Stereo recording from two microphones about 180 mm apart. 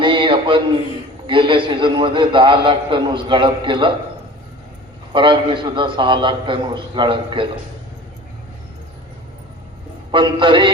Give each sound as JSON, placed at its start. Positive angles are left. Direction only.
{"t": 0.0, "sound": "a sound", "side_deg": -30}
{"t": 1.3, "sound": "a man's voice", "side_deg": -30}
{"t": 5.1, "sound": "a man's voice", "side_deg": -25}
{"t": 10.1, "sound": "a man's voice", "side_deg": -25}